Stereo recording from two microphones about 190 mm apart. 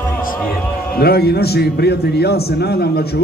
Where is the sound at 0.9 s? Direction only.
55° left (ahead or behind).